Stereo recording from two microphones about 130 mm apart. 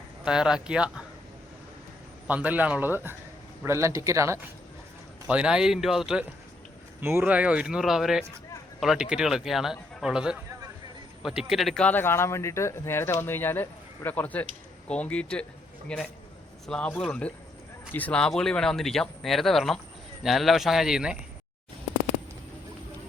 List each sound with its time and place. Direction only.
0.3 s speech: 5° right (ahead or behind)
2.2 s speech: 10° right (ahead or behind)
5.3 s speech: 5° right (ahead or behind)
7.0 s speech: 15° right (ahead or behind)